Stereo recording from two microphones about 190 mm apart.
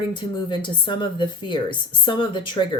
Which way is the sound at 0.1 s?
25° left (ahead or behind).